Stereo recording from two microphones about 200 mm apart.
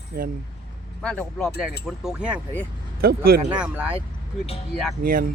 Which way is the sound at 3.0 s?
50° right (ahead or behind).